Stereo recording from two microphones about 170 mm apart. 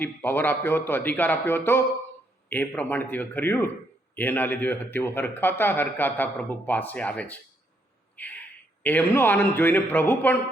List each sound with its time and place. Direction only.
0.0 s a man's voice: 10° left (ahead or behind)
8.1 s a sound: 10° left (ahead or behind)
8.8 s a man's voice: 10° left (ahead or behind)